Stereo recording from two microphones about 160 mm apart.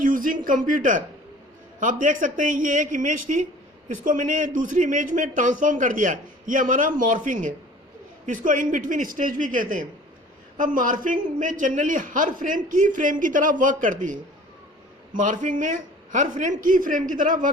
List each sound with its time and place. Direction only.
0.0 s a man's voice: 55° right (ahead or behind)